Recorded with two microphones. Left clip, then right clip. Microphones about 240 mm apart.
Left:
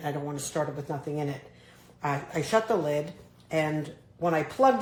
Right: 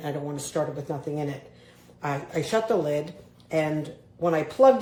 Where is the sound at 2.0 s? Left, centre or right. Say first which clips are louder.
Right 1 dB; left.